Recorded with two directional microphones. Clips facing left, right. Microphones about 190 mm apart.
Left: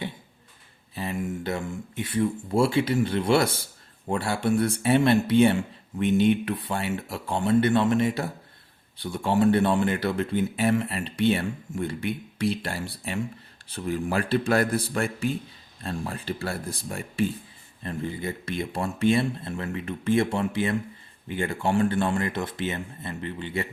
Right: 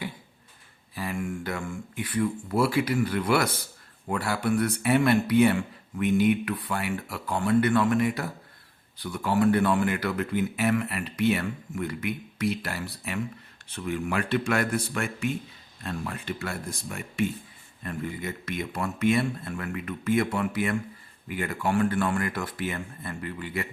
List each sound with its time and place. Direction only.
0.9 s speech: 25° left (ahead or behind)